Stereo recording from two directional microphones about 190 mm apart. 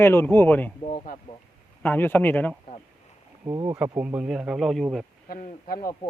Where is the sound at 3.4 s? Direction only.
20° right (ahead or behind).